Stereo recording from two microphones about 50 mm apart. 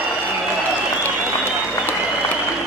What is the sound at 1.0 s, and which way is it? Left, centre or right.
Applause, left.